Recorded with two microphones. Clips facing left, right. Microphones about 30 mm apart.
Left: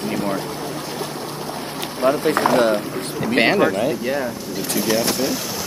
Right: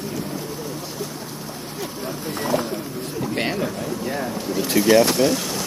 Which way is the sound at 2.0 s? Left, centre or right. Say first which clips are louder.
Left 13 dB; left.